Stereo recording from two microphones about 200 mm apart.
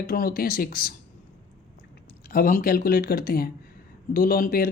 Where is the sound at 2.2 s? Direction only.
45° left (ahead or behind).